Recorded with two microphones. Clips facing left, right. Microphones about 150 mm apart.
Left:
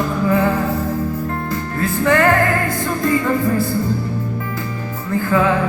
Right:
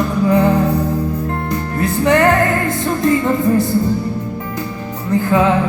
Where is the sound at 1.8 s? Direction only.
20° right (ahead or behind).